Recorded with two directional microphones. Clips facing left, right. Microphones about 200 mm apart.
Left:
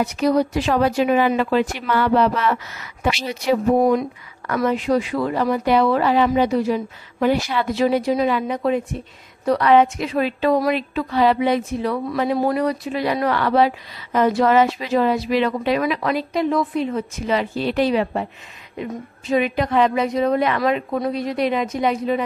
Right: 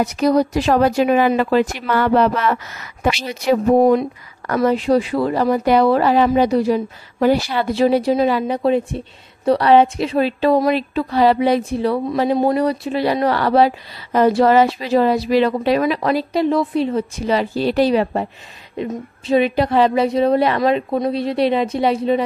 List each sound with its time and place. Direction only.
0.0 s a woman's voice: 40° right (ahead or behind)
4.6 s speech: 30° right (ahead or behind)